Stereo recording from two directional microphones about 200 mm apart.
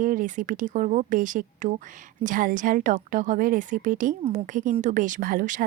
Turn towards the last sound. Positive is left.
turn(degrees=-40)  # may be behind; listen again after turning